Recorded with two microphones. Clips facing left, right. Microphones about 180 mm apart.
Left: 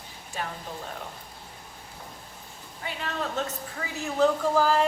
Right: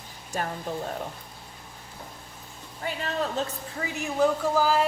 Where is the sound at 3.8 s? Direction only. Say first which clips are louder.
Even; 15° right (ahead or behind).